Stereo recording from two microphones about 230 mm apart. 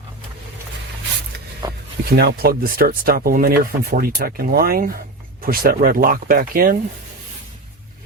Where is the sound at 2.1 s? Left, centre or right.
Right.